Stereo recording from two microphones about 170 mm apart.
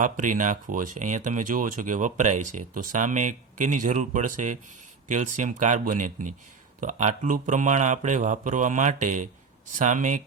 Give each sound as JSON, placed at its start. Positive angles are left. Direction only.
{"t": 0.0, "sound": "speech", "side_deg": -50}